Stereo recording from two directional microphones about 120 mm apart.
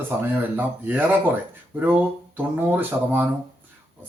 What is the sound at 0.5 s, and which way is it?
Speech, 15° right (ahead or behind).